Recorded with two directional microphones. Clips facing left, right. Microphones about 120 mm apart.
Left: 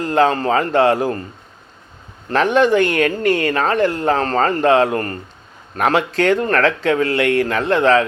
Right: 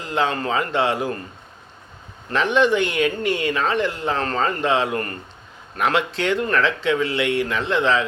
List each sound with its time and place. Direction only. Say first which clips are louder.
0.0 s speech: left 7 dB; 45° left (ahead or behind)
2.3 s speech: left 4 dB; 45° left (ahead or behind)